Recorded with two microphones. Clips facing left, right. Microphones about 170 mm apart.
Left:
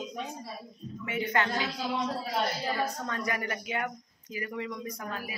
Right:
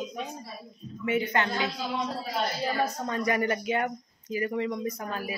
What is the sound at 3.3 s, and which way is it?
Speech, 30° right (ahead or behind).